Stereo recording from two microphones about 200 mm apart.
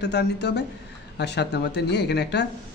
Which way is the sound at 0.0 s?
60° left (ahead or behind).